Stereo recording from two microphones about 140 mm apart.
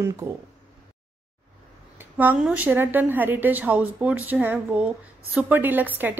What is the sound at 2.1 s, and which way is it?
A woman's voice, 10° right (ahead or behind).